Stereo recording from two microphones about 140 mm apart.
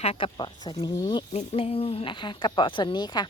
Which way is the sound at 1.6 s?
45° left (ahead or behind).